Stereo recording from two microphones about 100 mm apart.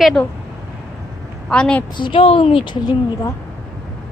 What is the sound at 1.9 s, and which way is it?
Speech, 60° left (ahead or behind).